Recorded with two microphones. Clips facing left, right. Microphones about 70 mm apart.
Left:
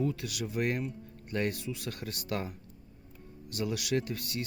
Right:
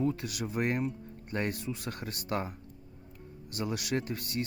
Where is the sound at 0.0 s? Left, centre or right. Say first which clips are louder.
Right 1 dB; right.